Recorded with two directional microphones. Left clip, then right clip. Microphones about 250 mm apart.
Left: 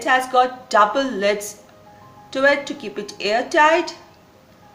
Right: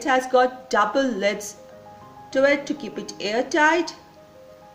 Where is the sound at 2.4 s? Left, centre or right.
Right.